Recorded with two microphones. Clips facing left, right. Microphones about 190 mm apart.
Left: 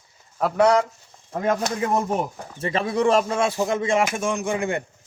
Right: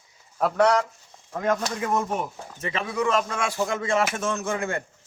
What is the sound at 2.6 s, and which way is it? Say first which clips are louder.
Speech: left 5 dB; 35° left (ahead or behind).